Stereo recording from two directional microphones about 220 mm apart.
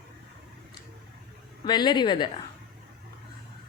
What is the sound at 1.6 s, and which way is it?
Speech, 20° left (ahead or behind).